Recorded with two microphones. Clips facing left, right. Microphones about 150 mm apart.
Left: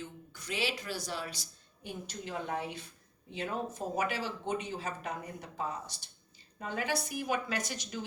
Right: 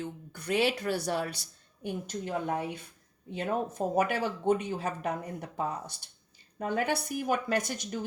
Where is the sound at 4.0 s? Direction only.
55° right (ahead or behind).